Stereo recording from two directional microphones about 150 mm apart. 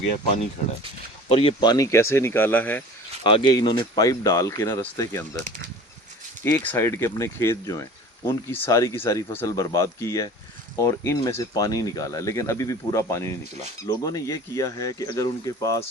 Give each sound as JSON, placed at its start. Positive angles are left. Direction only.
{"t": 1.3, "sound": "speech", "side_deg": 35}
{"t": 1.7, "sound": "speech", "side_deg": 20}
{"t": 3.2, "sound": "speech", "side_deg": 30}